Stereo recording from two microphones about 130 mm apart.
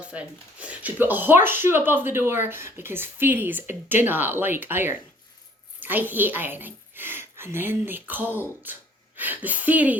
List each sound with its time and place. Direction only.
0.0 s a woman's voice: 10° right (ahead or behind)